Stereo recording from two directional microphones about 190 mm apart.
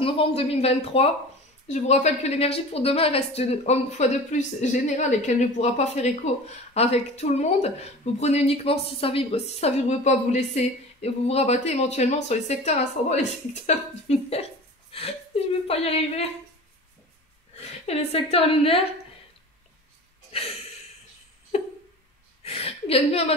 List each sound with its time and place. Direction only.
0.0 s a woman's voice: 30° left (ahead or behind)
17.6 s a woman's voice: 35° left (ahead or behind)
20.3 s speech: 30° left (ahead or behind)
21.5 s a sound: 35° left (ahead or behind)